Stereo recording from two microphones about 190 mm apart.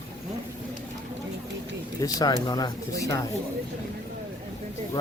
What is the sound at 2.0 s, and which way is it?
Speech, 20° left (ahead or behind).